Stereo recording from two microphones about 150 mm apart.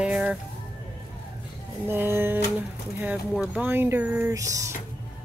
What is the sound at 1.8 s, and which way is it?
Music, 15° right (ahead or behind).